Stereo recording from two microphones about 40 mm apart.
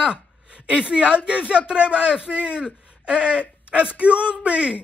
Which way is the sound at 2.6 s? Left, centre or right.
Right.